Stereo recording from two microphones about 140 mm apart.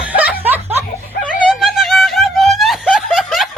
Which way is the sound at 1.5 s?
Centre (ahead or behind).